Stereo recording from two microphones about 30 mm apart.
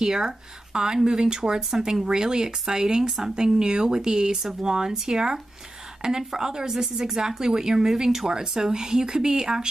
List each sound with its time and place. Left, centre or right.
0.0 s speech: centre
1.2 s speech: right
3.1 s speech: centre
3.3 s speech: right
6.7 s speech: centre